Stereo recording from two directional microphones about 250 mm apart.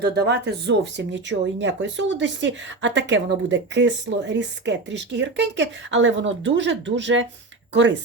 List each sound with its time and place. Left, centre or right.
0.0 s speech: right